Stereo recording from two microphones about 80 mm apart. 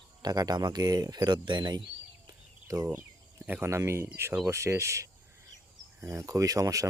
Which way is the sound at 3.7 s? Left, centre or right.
Right.